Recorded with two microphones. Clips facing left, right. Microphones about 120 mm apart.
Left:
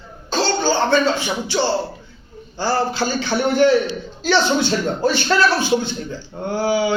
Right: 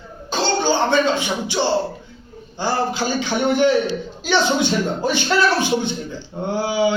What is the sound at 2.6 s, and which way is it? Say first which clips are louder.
A man's voice: left 1 dB; 15° right (ahead or behind).